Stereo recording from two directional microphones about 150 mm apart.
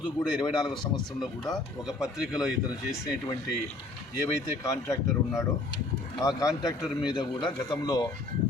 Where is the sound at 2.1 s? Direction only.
5° right (ahead or behind).